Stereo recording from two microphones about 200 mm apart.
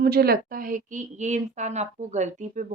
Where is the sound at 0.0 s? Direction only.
50° right (ahead or behind).